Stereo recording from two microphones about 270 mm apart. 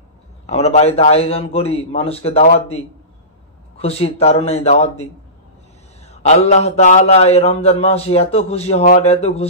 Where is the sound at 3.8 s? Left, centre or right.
Left.